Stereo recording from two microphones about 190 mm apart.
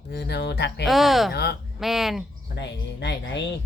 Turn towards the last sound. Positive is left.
turn(degrees=65)  # may be behind; listen again after turning